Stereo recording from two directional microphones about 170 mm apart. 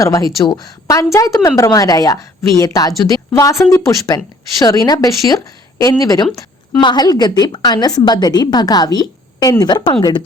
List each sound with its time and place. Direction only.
0.0 s a woman's voice: 20° left (ahead or behind)